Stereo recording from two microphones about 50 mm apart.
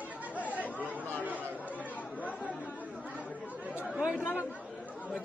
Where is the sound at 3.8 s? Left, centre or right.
Centre.